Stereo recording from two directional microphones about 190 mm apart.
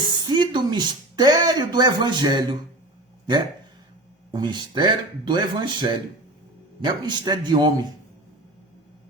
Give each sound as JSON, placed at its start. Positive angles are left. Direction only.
{"t": 0.1, "sound": "speech", "side_deg": -20}
{"t": 4.3, "sound": "speech", "side_deg": -25}